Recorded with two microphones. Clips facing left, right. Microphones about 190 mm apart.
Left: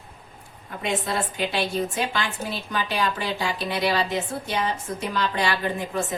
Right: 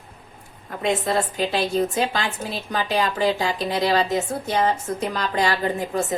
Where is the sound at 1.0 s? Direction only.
40° right (ahead or behind).